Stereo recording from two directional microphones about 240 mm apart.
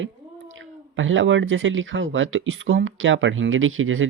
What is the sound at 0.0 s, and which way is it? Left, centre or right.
Speech, right.